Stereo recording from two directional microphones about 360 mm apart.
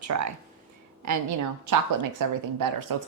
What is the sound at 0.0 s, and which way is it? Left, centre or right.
A woman's voice, right.